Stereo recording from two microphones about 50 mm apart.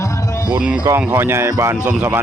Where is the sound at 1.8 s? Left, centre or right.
Right.